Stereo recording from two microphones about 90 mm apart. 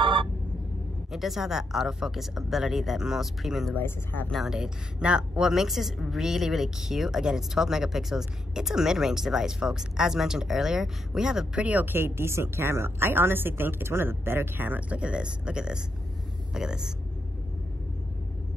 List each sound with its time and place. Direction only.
0.0 s vehicle: 65° right (ahead or behind)
1.1 s speech: centre (ahead or behind)
3.7 s speech: 20° left (ahead or behind)
4.3 s a woman's voice: 5° right (ahead or behind)